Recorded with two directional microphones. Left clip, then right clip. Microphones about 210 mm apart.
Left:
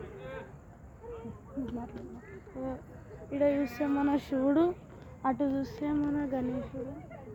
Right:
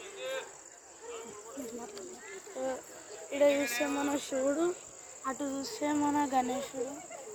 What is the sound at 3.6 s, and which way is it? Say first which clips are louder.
Speech: left 1 dB; 30° left (ahead or behind).